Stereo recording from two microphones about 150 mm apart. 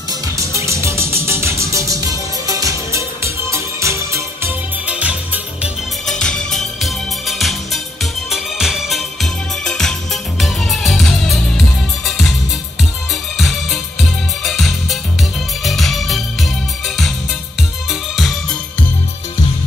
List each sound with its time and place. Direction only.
0.4 s music: 20° right (ahead or behind)
6.0 s music: 5° left (ahead or behind)
13.4 s music: centre (ahead or behind)
17.8 s music: centre (ahead or behind)